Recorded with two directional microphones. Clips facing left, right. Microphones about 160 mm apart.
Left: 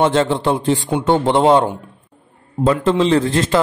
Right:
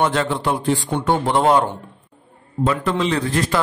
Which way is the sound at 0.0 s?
25° left (ahead or behind).